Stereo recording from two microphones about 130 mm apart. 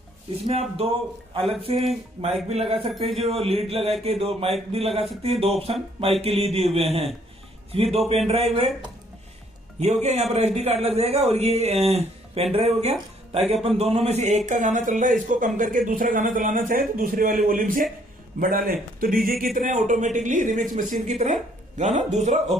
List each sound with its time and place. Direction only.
0.5 s a man's voice: 50° right (ahead or behind)
9.8 s a man's voice: 55° right (ahead or behind); by 15.1 s 80° right
15.2 s speech: 90° right
20.9 s a man's voice: 65° right (ahead or behind)